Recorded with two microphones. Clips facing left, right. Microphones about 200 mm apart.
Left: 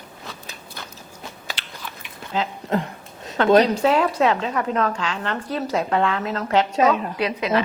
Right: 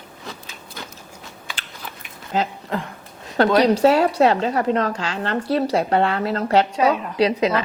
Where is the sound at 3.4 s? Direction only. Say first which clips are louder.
Right 1 dB; 35° right (ahead or behind).